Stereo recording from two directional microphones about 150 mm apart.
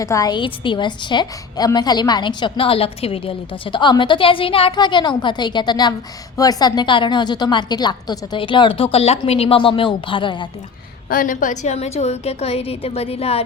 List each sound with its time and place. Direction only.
0.0 s a woman's voice: 20° left (ahead or behind)
11.1 s a woman's voice: 65° left (ahead or behind); by 13.4 s 40° left (ahead or behind)